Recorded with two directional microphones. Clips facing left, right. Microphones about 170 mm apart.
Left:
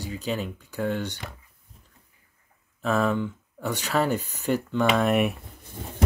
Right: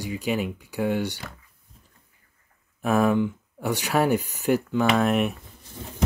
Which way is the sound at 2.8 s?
10° right (ahead or behind).